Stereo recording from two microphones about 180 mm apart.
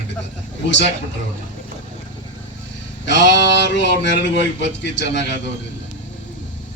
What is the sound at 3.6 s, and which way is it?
A man's voice, 75° left (ahead or behind).